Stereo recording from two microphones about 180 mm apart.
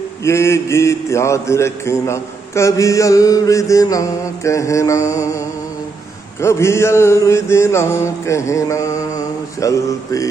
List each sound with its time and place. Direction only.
0.2 s mantra: 15° left (ahead or behind)
6.4 s mantra: 15° left (ahead or behind)